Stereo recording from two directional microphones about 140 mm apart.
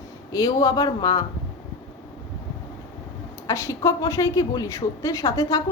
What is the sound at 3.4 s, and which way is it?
A woman's voice, 20° left (ahead or behind).